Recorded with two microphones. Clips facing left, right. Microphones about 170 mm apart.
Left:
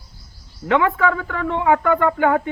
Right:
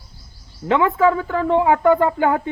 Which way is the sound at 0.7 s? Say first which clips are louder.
Right 2 dB; 30° right (ahead or behind).